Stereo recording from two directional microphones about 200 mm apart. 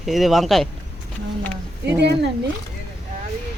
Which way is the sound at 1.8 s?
55° right (ahead or behind).